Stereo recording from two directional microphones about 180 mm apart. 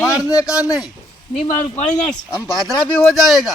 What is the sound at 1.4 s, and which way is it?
Speech, 40° left (ahead or behind).